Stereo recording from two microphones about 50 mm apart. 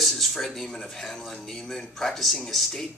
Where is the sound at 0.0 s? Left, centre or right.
Centre.